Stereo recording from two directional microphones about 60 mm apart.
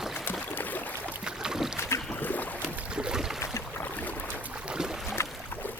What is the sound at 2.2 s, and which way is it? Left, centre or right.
Boat, left.